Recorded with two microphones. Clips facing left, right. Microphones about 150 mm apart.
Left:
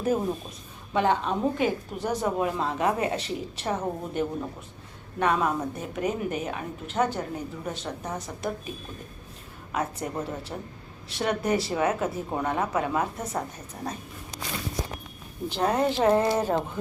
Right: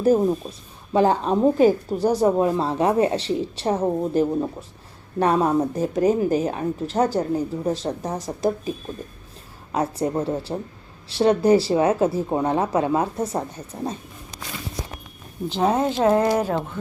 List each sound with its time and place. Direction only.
0.9 s a woman's voice: 35° right (ahead or behind)
9.7 s a woman's voice: 35° right (ahead or behind)
15.4 s speech: 15° right (ahead or behind)